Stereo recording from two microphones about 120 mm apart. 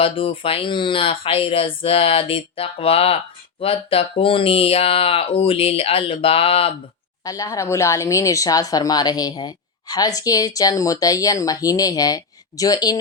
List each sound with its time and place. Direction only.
0.0 s speech: 50° left (ahead or behind)
7.3 s speech: 25° left (ahead or behind)